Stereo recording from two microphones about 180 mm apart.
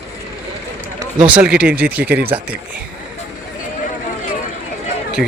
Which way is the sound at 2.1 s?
60° right (ahead or behind).